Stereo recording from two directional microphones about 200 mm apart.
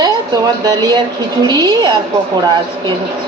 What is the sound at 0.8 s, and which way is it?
A woman's voice, 20° right (ahead or behind).